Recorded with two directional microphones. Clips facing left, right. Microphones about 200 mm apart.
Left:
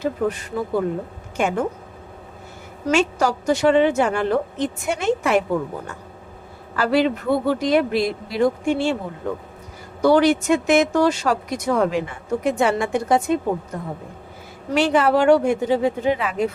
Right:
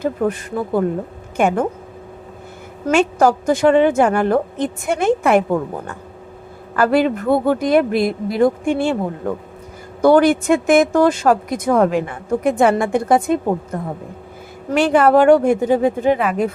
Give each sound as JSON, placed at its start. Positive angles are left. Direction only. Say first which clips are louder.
{"t": 0.0, "sound": "speech", "louder": "right 3 dB", "side_deg": -50}
{"t": 2.9, "sound": "speech", "louder": "right 5 dB", "side_deg": -55}